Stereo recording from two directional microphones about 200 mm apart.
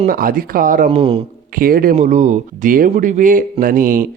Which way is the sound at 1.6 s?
45° right (ahead or behind).